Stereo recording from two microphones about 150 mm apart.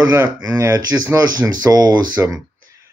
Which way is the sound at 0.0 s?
20° right (ahead or behind).